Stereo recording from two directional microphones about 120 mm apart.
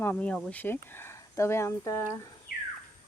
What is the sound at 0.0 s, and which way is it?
Speech, 15° left (ahead or behind).